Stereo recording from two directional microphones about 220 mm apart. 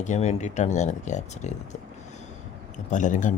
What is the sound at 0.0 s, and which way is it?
Speech, 30° left (ahead or behind).